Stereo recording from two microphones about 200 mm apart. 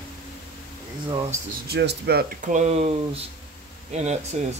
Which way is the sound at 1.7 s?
55° right (ahead or behind).